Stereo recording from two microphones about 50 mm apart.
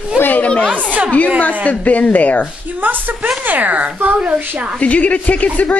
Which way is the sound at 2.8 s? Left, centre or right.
Right.